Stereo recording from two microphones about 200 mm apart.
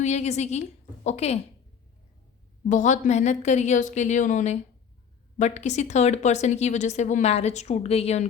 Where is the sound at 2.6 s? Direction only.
35° left (ahead or behind).